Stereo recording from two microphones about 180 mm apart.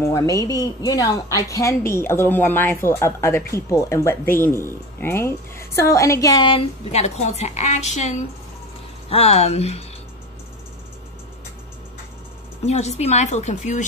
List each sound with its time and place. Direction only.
0.0 s a woman's voice: 15° left (ahead or behind); by 8.1 s 40° left (ahead or behind)
9.1 s a woman's voice: 35° left (ahead or behind)
12.6 s a woman's voice: 40° left (ahead or behind)